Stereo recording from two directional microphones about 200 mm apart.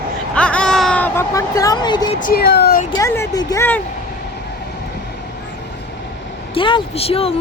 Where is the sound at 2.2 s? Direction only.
45° left (ahead or behind).